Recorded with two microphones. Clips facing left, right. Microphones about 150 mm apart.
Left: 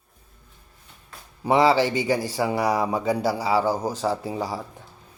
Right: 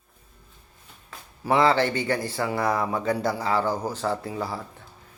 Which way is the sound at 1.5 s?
15° left (ahead or behind).